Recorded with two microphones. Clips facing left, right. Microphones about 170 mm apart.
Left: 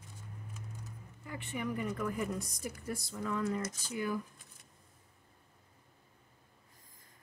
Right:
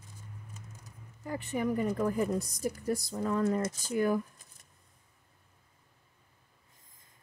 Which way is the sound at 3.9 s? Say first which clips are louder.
Right 8 dB; 50° right (ahead or behind).